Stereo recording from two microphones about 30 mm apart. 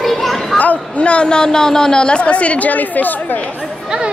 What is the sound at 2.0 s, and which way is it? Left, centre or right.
Speech, left.